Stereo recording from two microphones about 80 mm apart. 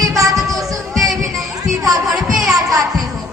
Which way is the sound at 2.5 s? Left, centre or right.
Right.